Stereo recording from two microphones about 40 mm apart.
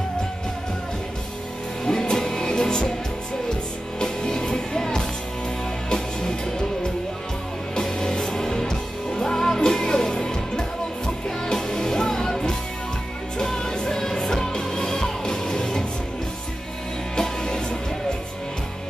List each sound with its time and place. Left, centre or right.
1.9 s music: centre
4.0 s music: centre
7.7 s music: centre
17.1 s music: centre